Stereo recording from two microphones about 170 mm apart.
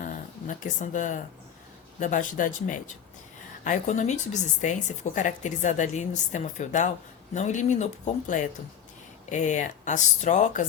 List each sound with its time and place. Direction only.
0.0 s a woman's voice: 50° left (ahead or behind)